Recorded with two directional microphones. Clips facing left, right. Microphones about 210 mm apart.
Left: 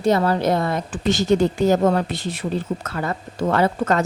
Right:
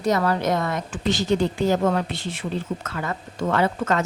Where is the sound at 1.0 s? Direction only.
45° left (ahead or behind).